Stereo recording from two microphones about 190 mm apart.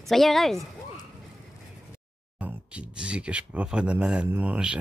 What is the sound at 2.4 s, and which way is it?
Speech, 5° right (ahead or behind).